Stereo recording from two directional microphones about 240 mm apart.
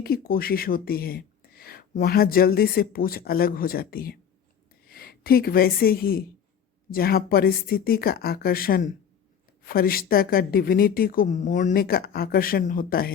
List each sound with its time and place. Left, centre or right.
0.0 s speech: left